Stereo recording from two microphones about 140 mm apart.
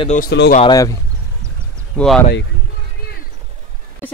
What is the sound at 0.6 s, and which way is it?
Speech, 25° left (ahead or behind).